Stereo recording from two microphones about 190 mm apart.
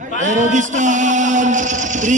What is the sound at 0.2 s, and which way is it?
A man's voice, 40° right (ahead or behind).